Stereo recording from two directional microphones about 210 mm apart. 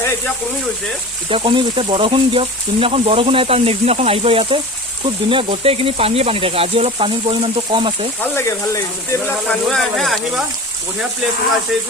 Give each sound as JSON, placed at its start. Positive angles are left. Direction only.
{"t": 1.3, "sound": "speech", "side_deg": -25}
{"t": 8.2, "sound": "speech", "side_deg": 10}